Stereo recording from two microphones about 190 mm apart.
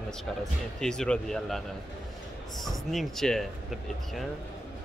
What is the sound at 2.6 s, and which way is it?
Speech, centre (ahead or behind).